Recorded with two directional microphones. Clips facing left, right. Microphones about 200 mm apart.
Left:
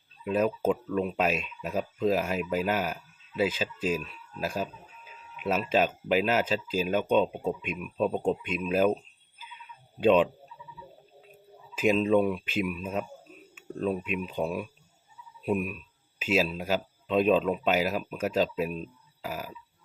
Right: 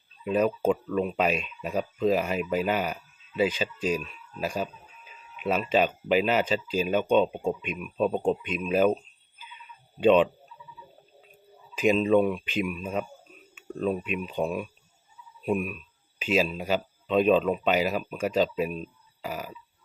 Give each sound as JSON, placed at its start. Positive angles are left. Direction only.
{"t": 0.3, "sound": "speech", "side_deg": 0}
{"t": 9.4, "sound": "a sound", "side_deg": 0}
{"t": 11.7, "sound": "speech", "side_deg": 5}